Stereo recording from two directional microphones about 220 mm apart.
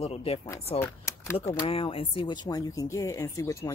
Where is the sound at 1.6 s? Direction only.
25° left (ahead or behind).